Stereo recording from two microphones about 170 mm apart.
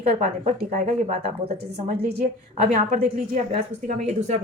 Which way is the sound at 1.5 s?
70° right (ahead or behind).